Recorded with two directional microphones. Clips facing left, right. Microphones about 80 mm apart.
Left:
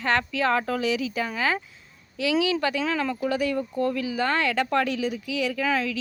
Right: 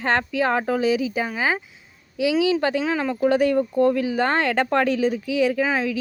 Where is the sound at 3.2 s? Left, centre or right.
Right.